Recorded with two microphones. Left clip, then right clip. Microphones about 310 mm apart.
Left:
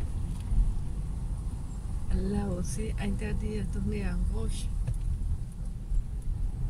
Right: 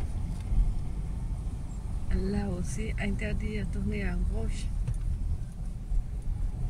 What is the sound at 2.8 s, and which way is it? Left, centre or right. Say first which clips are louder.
Speech: right 2 dB; left.